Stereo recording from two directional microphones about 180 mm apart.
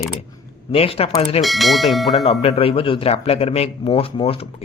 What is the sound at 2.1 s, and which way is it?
A man's voice, 35° left (ahead or behind).